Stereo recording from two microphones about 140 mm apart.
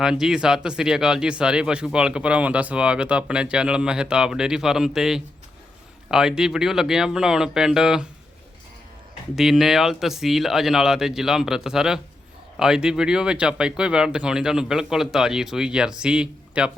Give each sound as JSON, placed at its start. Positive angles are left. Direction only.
{"t": 0.0, "sound": "speech", "side_deg": -5}
{"t": 9.3, "sound": "speech", "side_deg": 0}